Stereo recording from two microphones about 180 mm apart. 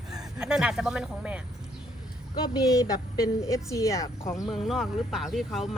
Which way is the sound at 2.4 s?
20° left (ahead or behind).